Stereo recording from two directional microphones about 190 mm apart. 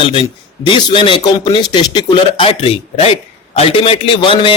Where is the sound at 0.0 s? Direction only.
25° left (ahead or behind).